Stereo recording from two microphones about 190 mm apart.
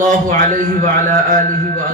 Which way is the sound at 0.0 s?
45° right (ahead or behind).